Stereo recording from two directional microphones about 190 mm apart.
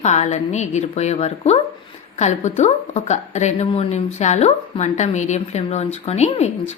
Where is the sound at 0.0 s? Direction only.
35° left (ahead or behind).